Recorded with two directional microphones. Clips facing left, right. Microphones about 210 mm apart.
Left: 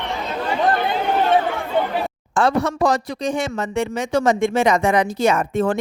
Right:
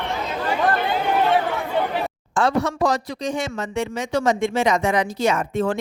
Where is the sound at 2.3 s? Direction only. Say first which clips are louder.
Left 2 dB; 55° left (ahead or behind).